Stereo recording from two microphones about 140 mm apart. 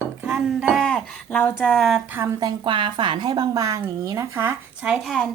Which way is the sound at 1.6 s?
Centre (ahead or behind).